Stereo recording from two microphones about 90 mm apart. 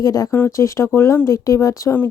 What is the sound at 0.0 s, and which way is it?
A woman's voice, 40° left (ahead or behind).